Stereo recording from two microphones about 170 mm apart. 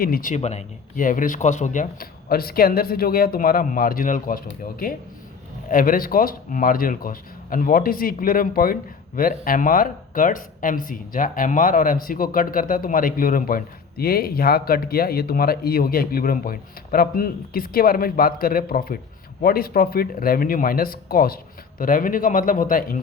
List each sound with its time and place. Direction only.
0.0 s speech: 55° left (ahead or behind)